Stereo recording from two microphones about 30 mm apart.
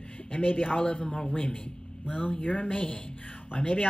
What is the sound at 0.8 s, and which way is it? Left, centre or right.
Speech, left.